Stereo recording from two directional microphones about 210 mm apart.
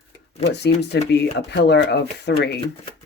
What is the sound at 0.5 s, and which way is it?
Speech, 55° left (ahead or behind).